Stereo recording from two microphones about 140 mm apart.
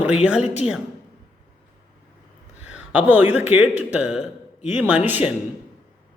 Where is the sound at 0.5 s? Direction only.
5° right (ahead or behind).